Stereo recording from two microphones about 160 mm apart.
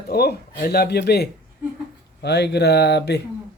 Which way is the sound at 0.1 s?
75° left (ahead or behind).